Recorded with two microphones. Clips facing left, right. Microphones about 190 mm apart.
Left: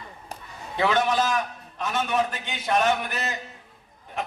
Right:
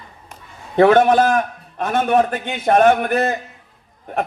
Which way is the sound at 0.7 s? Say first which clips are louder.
Right 11 dB; 55° right (ahead or behind).